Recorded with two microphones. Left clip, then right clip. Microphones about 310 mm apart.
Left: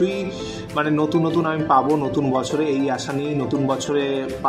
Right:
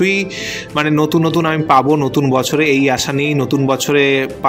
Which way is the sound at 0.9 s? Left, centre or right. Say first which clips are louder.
Right 5 dB; right.